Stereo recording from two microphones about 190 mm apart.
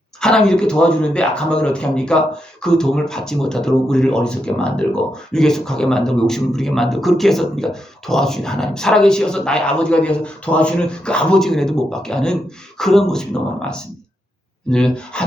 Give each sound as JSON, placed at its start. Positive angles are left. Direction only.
{"t": 0.2, "sound": "a man's voice", "side_deg": 5}